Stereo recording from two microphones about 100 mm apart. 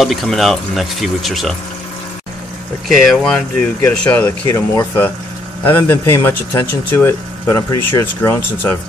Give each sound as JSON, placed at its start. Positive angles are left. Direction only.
{"t": 0.0, "sound": "speech", "side_deg": 0}
{"t": 2.9, "sound": "speech", "side_deg": 0}
{"t": 4.1, "sound": "speech", "side_deg": 25}